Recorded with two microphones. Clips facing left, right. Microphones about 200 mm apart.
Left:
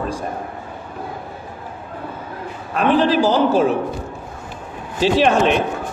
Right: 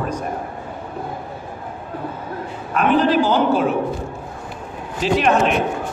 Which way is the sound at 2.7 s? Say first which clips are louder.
Even; 35° left (ahead or behind).